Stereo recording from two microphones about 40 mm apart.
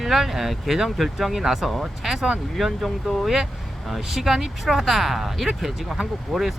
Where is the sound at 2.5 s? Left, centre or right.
Centre.